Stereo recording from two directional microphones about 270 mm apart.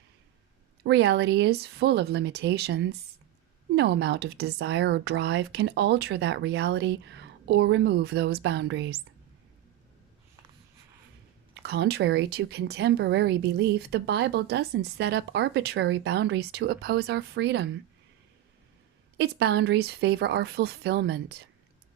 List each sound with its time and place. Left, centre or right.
0.9 s speech: right
11.6 s speech: right
19.1 s speech: right